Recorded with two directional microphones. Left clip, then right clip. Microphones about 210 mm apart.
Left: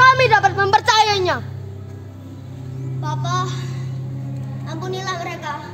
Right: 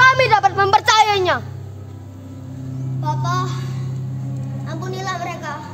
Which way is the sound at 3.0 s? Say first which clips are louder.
Right 1 dB; 5° right (ahead or behind).